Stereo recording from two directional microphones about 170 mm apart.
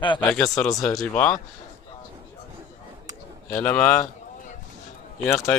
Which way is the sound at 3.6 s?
10° left (ahead or behind).